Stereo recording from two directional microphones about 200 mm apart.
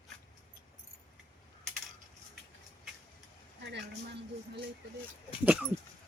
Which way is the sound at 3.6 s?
55° right (ahead or behind).